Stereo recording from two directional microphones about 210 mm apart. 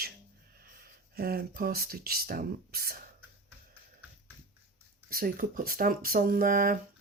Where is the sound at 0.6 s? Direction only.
45° right (ahead or behind).